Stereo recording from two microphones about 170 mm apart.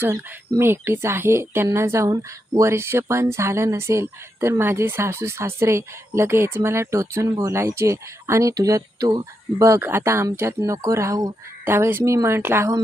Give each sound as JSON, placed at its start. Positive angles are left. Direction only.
{"t": 0.0, "sound": "speech", "side_deg": -15}